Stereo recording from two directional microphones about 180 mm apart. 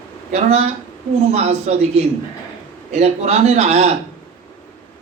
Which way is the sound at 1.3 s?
40° right (ahead or behind).